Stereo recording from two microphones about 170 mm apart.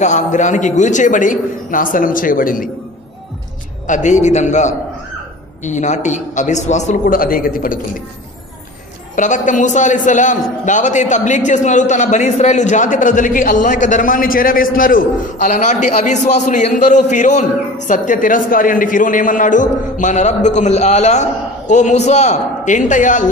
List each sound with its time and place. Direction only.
0.0 s a man's voice: 45° left (ahead or behind)
3.8 s a man's voice: 45° left (ahead or behind)
9.1 s a man's voice: 50° left (ahead or behind)